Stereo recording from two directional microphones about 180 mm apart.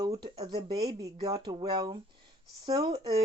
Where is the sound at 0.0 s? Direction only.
20° right (ahead or behind).